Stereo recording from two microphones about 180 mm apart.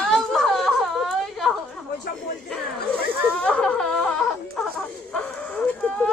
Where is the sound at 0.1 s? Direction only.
Centre (ahead or behind).